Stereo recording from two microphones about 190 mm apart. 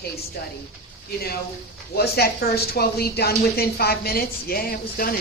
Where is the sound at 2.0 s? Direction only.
55° left (ahead or behind).